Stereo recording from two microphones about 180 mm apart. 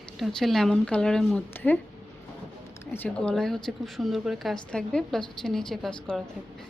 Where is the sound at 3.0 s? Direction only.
5° left (ahead or behind).